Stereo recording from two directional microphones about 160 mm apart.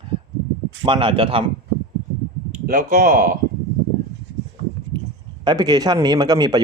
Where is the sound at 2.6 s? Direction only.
60° right (ahead or behind).